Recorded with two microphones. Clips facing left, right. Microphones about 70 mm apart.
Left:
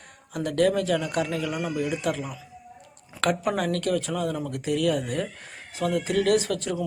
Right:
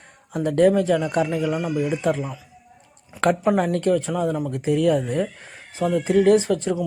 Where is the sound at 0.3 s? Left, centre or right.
Right.